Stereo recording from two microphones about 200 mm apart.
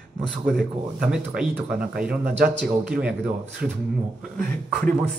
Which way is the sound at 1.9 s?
50° right (ahead or behind).